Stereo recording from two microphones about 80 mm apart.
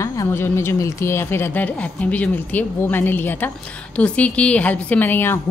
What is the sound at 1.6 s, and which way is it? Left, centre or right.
A woman's voice, centre.